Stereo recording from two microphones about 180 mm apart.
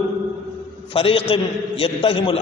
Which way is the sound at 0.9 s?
30° left (ahead or behind).